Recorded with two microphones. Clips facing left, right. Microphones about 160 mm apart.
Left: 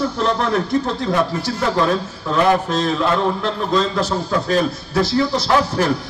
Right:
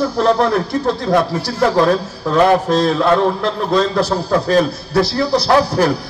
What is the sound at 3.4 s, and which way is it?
A man's voice, 35° right (ahead or behind).